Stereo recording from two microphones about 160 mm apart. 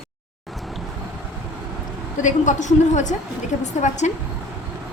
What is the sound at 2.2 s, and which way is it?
A woman's voice, 50° left (ahead or behind).